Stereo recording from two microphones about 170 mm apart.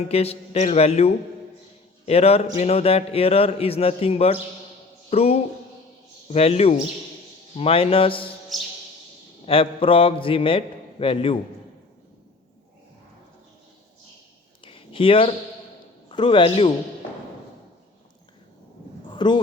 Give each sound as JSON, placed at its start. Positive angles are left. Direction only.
{"t": 0.1, "sound": "a man's voice", "side_deg": 35}
{"t": 8.5, "sound": "music", "side_deg": 0}
{"t": 9.5, "sound": "a man's voice", "side_deg": 30}
{"t": 14.6, "sound": "a sound", "side_deg": 30}
{"t": 16.0, "sound": "a man's voice", "side_deg": 30}
{"t": 19.1, "sound": "speech", "side_deg": 25}